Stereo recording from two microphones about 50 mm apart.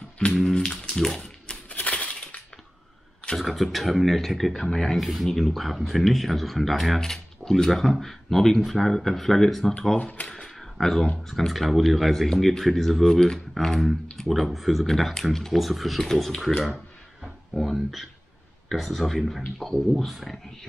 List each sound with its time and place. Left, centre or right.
0.3 s speech: centre
1.7 s coin: left
3.3 s speech: centre
4.6 s speech: centre
4.9 s speech: centre
9.9 s speech: left
10.2 s a sound: centre
11.2 s speech: centre